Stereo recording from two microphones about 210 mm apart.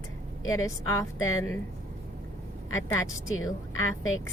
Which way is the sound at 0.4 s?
15° left (ahead or behind).